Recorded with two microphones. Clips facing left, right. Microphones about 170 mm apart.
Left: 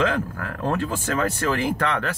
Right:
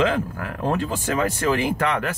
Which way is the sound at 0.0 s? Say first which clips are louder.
Right 2 dB; 15° right (ahead or behind).